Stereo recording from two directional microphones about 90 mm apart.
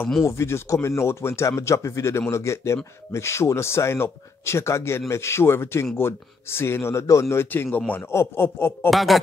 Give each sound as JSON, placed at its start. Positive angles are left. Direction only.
{"t": 0.2, "sound": "a man's voice", "side_deg": 30}
{"t": 8.9, "sound": "speech", "side_deg": 0}